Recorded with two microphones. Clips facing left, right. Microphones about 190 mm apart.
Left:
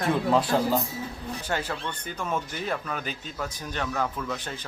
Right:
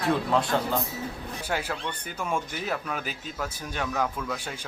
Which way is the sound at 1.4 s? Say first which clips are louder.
Even; 10° right (ahead or behind).